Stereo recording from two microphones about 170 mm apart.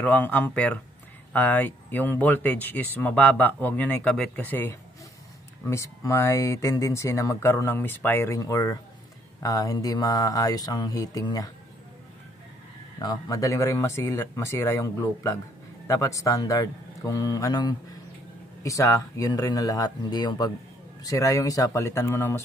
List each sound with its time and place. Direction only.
0.0 s speech: 10° left (ahead or behind)
13.0 s speech: 20° left (ahead or behind)